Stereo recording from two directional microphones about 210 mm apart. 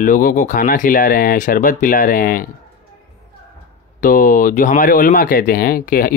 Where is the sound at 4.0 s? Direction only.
40° left (ahead or behind).